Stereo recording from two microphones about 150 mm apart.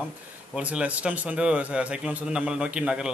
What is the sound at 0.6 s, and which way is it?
Speech, 10° right (ahead or behind).